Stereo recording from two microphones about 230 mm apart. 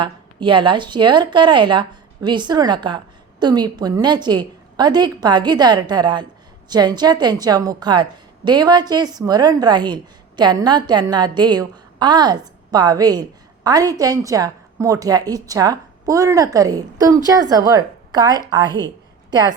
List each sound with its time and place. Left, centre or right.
0.0 s a woman's voice: right